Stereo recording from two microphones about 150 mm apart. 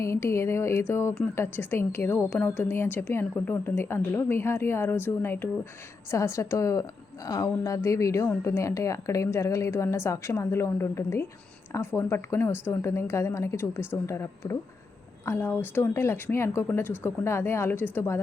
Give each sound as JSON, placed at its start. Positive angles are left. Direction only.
{"t": 0.0, "sound": "a woman's voice", "side_deg": 20}